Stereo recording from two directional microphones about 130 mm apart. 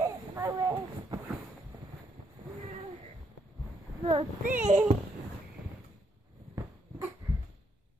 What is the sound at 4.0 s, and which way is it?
Speech, 45° right (ahead or behind).